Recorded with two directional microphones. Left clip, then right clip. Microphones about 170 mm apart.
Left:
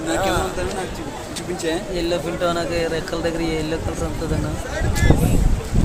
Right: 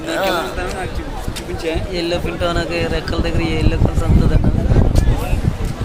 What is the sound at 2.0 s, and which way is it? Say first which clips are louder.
Speech: right 2 dB; 5° right (ahead or behind).